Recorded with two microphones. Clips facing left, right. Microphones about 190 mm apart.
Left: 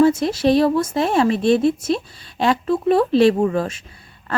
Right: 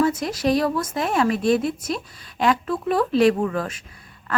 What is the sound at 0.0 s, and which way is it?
Speech, 25° left (ahead or behind).